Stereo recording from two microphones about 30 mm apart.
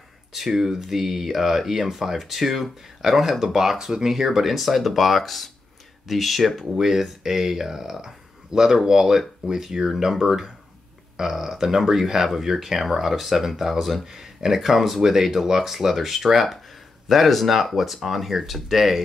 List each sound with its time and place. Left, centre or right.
0.3 s speech: centre
4.0 s speech: centre